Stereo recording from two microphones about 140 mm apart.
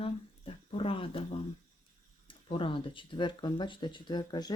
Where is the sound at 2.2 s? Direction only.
35° left (ahead or behind).